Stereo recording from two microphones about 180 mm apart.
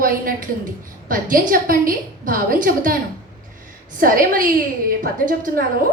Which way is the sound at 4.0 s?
50° right (ahead or behind).